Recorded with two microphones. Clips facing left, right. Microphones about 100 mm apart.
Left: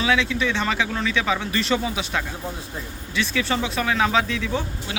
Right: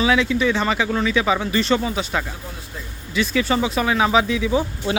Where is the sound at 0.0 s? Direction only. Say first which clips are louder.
Right 4 dB; centre (ahead or behind).